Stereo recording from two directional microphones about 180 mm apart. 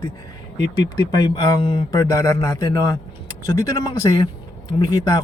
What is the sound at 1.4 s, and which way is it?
Speech, 25° left (ahead or behind).